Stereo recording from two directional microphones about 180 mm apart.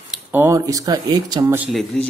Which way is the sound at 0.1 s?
10° right (ahead or behind).